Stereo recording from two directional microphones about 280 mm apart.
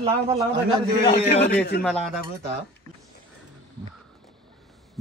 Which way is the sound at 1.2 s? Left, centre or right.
Left.